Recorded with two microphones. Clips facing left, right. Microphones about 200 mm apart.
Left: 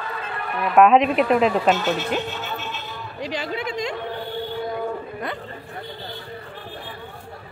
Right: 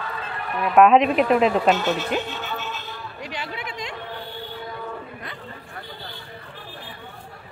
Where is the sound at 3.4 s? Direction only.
40° left (ahead or behind).